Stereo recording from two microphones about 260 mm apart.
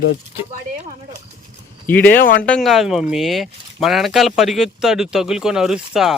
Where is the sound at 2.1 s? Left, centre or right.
Left.